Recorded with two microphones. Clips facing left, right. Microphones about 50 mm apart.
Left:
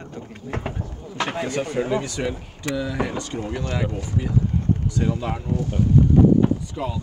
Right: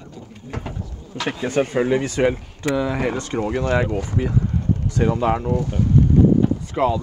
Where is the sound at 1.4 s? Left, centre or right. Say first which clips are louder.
Right 9 dB; right.